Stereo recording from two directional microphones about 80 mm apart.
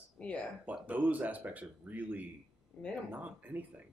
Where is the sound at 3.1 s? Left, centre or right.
Centre.